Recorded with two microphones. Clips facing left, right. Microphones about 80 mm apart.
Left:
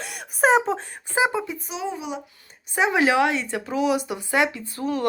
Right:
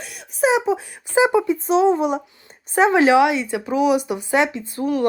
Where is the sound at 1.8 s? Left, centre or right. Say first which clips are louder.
Right 12 dB; right.